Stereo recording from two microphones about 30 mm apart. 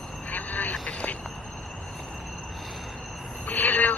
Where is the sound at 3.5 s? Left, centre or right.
Left.